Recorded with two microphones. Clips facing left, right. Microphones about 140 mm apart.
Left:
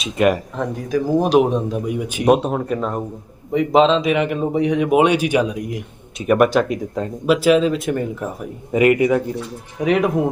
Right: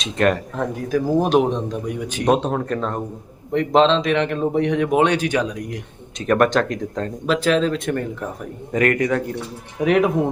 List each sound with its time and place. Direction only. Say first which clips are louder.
0.0 s a man's voice: left 2 dB; 5° left (ahead or behind)
9.8 s speech: even; centre (ahead or behind)